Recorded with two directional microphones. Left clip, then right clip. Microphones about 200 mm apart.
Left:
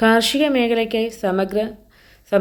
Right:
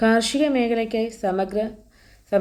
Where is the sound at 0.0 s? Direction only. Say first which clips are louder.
Left 4 dB; 5° left (ahead or behind).